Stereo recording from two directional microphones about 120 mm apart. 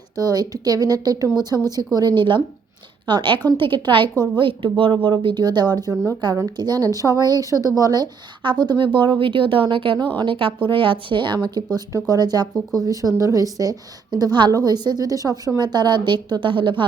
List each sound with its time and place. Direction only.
0.2 s a woman's voice: 30° right (ahead or behind)